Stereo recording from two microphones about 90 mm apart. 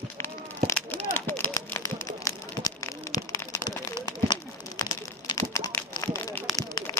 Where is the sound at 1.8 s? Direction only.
40° left (ahead or behind).